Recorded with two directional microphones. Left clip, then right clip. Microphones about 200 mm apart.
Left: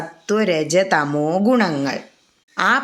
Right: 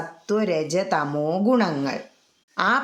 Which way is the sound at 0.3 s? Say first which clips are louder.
Left 5 dB; 5° left (ahead or behind).